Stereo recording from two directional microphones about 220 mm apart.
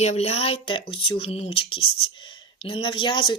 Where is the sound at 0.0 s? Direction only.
30° left (ahead or behind).